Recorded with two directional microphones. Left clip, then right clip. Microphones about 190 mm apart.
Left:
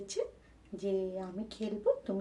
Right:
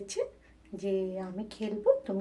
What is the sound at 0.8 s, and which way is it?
Speech, 15° right (ahead or behind).